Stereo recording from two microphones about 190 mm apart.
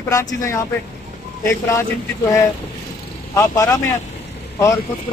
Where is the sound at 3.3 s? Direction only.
15° left (ahead or behind).